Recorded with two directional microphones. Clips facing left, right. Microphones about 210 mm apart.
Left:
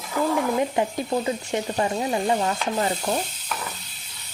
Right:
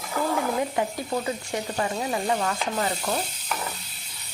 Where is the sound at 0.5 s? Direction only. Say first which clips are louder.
Left 3 dB; 20° left (ahead or behind).